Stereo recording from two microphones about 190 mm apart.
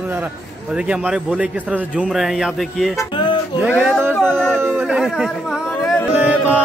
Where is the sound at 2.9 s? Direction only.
25° left (ahead or behind).